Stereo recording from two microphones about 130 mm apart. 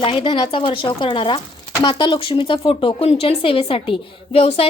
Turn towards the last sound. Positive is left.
turn(degrees=50)  # may be behind; listen again after turning